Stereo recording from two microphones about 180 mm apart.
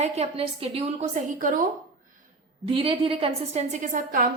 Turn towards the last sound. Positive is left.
turn(degrees=-45)  # may be behind; listen again after turning